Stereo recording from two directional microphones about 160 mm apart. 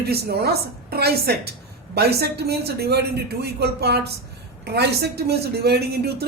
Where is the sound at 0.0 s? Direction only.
80° right.